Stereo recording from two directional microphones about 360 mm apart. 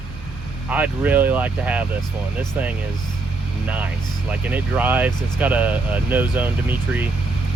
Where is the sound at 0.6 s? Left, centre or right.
Centre.